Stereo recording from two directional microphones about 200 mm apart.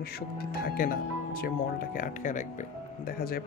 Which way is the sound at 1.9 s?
40° left (ahead or behind).